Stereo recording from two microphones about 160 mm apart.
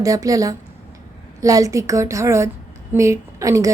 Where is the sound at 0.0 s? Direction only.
20° right (ahead or behind).